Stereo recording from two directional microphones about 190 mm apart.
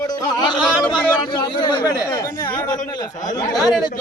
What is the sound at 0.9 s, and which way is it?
Speech, 25° left (ahead or behind).